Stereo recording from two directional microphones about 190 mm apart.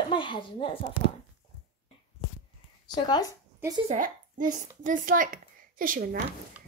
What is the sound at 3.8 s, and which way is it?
Speech, 45° right (ahead or behind).